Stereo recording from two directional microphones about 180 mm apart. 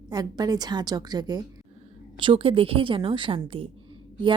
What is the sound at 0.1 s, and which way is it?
A woman's voice, 20° right (ahead or behind).